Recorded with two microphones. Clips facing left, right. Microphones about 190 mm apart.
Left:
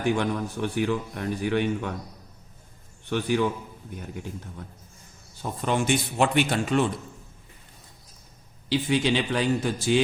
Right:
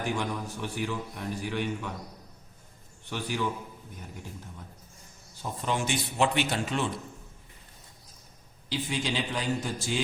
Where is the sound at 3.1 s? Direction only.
60° left (ahead or behind).